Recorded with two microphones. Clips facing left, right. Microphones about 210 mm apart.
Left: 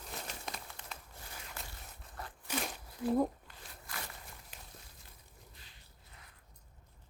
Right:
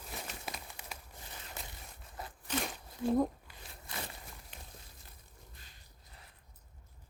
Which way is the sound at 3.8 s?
25° right (ahead or behind).